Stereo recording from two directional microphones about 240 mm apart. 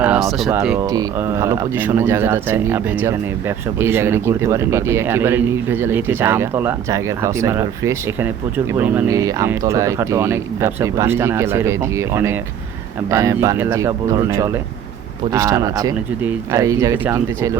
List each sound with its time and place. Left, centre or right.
0.0 s speech: centre